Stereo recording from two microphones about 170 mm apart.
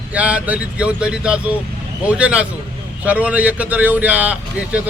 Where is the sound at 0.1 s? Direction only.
10° right (ahead or behind).